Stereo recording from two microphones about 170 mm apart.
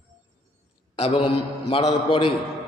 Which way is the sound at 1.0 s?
35° left (ahead or behind).